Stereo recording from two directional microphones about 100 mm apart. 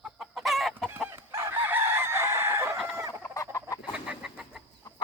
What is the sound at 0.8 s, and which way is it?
Chicken, 20° right (ahead or behind).